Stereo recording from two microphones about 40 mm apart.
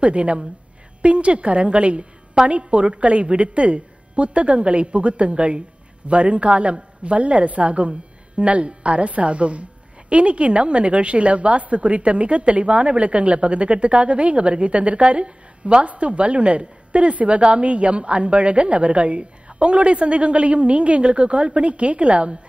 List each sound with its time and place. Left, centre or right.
0.0 s a woman's voice: right